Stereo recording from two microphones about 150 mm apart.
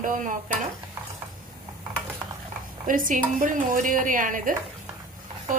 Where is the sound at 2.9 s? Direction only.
60° right (ahead or behind).